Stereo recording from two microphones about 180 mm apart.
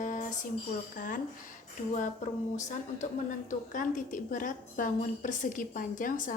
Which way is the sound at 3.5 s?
45° left (ahead or behind).